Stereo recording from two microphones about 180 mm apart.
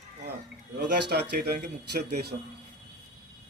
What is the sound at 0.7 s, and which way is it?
A man's voice, 60° right (ahead or behind).